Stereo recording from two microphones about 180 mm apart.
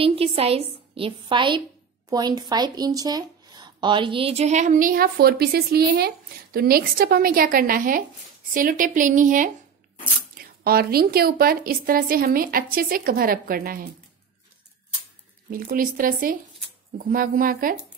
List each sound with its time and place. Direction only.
0.0 s a woman's voice: 30° right (ahead or behind); by 13.8 s 55° right (ahead or behind)
15.5 s speech: 50° right (ahead or behind)